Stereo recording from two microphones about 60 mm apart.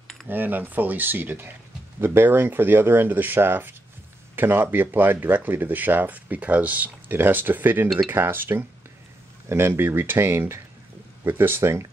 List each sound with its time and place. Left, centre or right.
0.3 s speech: right
9.5 s speech: right